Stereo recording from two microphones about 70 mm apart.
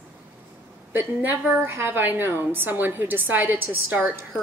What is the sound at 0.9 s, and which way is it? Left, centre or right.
A woman's voice, right.